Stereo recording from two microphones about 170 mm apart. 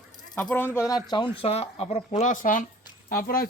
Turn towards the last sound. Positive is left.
turn(degrees=60)  # may be behind; listen again after turning